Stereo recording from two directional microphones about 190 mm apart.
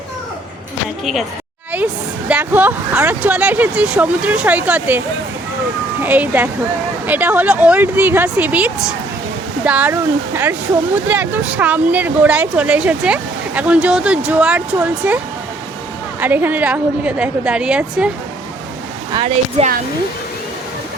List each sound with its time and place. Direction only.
1.7 s speech: 10° right (ahead or behind)
16.2 s speech: 10° right (ahead or behind)
19.1 s speech: 30° right (ahead or behind)